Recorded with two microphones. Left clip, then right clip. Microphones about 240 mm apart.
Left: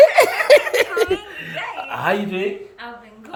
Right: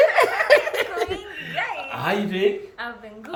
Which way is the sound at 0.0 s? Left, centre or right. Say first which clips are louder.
Left 5 dB; left.